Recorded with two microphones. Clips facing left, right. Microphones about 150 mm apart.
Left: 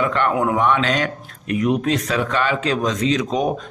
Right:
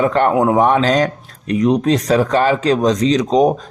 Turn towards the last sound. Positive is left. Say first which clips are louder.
# right 6 dB
turn(degrees=-35)  # may be behind; listen again after turning